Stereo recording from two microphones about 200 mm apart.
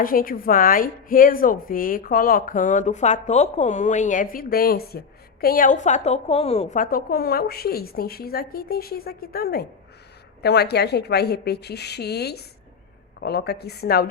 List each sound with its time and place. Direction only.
0.0 s a woman's voice: 45° left (ahead or behind)